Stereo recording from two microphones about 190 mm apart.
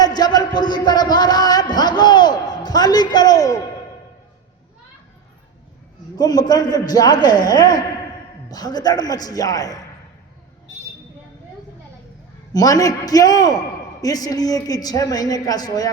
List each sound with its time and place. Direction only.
0.0 s a sound: 20° left (ahead or behind)
6.1 s speech: 20° left (ahead or behind)
12.5 s speech: 20° left (ahead or behind)